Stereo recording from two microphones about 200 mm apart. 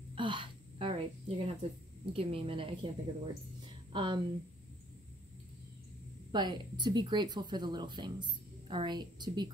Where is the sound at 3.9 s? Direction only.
25° right (ahead or behind).